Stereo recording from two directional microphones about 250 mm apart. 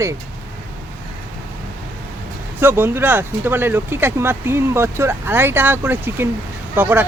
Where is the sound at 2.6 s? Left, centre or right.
Centre.